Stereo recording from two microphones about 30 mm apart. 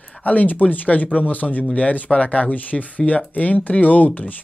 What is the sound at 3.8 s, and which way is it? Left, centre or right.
Speech, left.